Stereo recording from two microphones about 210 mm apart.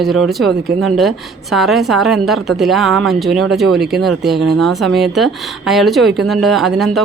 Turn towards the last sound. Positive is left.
turn(degrees=0)  # may be behind; listen again after turning